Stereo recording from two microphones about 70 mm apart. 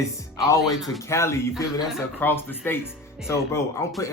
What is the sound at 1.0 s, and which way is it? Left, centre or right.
Speech, left.